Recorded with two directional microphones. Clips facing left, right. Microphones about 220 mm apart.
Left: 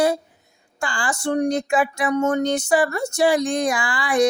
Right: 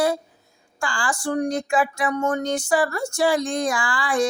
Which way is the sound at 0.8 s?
20° left (ahead or behind).